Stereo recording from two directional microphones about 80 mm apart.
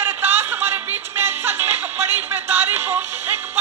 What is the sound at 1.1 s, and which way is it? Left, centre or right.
Music, right.